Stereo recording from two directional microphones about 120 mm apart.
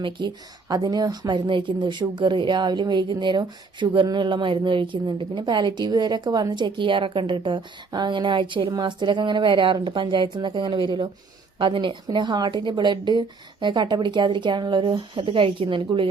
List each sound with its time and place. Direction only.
0.2 s speech: 40° right (ahead or behind)